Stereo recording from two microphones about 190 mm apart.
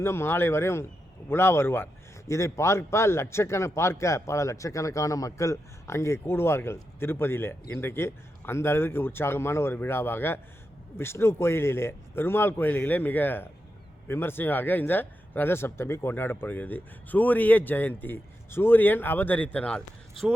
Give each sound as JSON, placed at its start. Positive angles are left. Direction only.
{"t": 0.0, "sound": "a man's voice", "side_deg": 15}